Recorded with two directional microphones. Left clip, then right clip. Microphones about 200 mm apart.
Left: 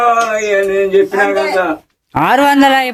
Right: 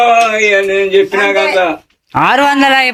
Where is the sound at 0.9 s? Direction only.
30° left (ahead or behind).